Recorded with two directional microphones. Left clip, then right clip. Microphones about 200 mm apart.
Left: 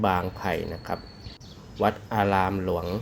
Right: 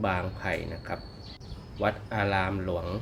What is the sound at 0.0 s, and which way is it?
Speech, 30° left (ahead or behind).